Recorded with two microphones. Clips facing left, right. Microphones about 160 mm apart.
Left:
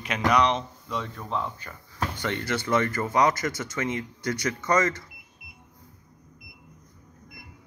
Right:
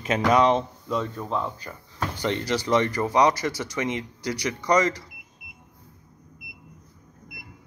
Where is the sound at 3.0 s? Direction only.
15° right (ahead or behind).